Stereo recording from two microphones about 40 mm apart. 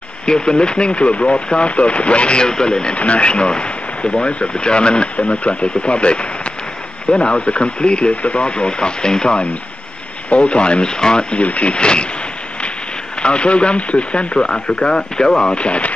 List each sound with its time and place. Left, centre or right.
0.3 s speech: left
13.2 s speech: left